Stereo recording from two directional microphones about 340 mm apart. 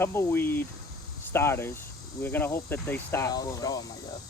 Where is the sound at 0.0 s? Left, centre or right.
Centre.